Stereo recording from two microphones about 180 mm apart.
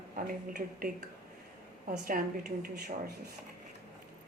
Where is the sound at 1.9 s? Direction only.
55° right (ahead or behind).